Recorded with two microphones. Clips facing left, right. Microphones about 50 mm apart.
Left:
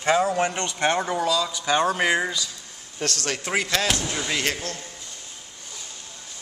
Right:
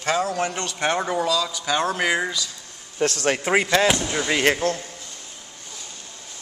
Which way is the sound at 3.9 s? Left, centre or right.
Centre.